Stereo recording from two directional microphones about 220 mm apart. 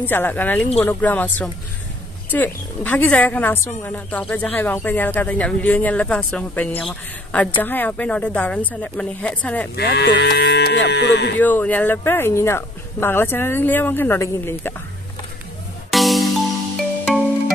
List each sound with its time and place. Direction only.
0.0 s a woman's voice: 10° left (ahead or behind)
9.8 s speech: 50° left (ahead or behind)
11.3 s a woman's voice: 10° left (ahead or behind)
15.9 s music: centre (ahead or behind)